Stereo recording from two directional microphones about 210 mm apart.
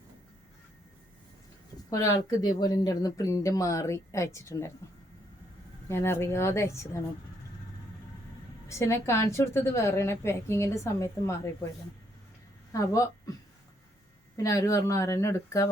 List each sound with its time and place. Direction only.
1.9 s speech: 15° left (ahead or behind)
5.9 s speech: 10° left (ahead or behind)
8.7 s speech: 15° left (ahead or behind)
12.7 s a woman's voice: 15° left (ahead or behind)
14.3 s speech: 15° left (ahead or behind)